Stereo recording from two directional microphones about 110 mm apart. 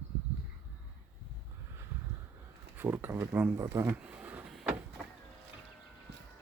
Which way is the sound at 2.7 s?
20° right (ahead or behind).